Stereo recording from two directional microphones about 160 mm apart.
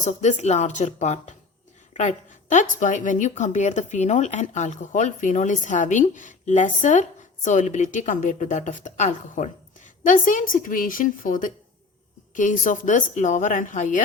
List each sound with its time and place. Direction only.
0.0 s a woman's voice: 50° left (ahead or behind)